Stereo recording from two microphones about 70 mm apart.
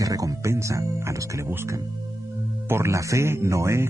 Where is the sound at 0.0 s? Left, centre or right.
Right.